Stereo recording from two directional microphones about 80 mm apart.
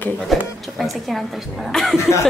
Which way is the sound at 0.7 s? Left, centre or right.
Centre.